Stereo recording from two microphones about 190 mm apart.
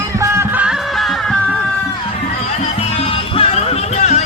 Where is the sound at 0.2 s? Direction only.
10° right (ahead or behind).